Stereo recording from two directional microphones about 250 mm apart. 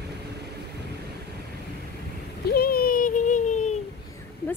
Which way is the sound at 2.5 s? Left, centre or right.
Left.